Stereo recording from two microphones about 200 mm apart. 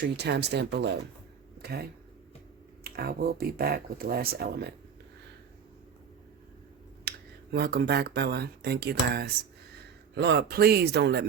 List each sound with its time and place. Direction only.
0.0 s speech: 55° right (ahead or behind)
7.5 s speech: 50° right (ahead or behind)